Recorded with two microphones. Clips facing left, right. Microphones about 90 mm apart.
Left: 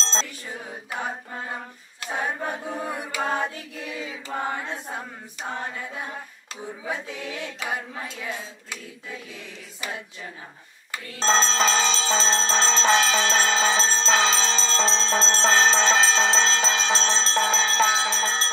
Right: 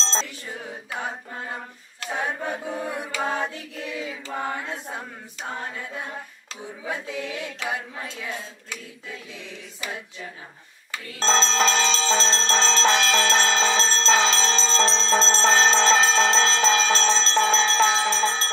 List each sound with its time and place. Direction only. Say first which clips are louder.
0.0 s music: right 1 dB; centre (ahead or behind)
2.0 s choir: even; 5° left (ahead or behind)
5.8 s a sound: even; 10° left (ahead or behind)
6.8 s music: right 2 dB; centre (ahead or behind)
7.7 s a sound: even; 5° left (ahead or behind)
11.1 s music: even; centre (ahead or behind)
14.5 s bell: right 2 dB; 5° left (ahead or behind)
17.1 s music: right 2 dB; centre (ahead or behind)
17.8 s bell: right 2 dB; 20° left (ahead or behind)